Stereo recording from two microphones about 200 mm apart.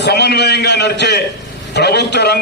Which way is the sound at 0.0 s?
55° left (ahead or behind).